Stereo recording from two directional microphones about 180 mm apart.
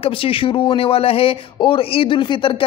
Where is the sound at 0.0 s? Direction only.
30° left (ahead or behind).